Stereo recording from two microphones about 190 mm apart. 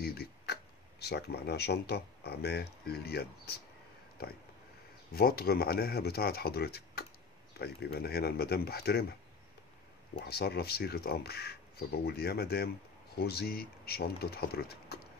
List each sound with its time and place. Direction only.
0.0 s speech: 55° left (ahead or behind)
10.1 s speech: 55° left (ahead or behind)